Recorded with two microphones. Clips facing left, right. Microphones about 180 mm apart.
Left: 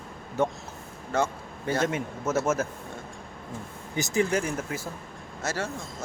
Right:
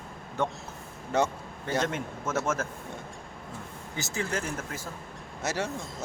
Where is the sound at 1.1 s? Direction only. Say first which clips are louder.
Even; 20° right (ahead or behind).